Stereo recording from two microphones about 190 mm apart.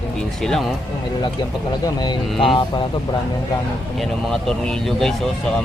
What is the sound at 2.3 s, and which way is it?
Speech, centre (ahead or behind).